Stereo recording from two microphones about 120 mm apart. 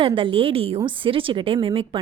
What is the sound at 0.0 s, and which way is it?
A woman's voice, 45° right (ahead or behind).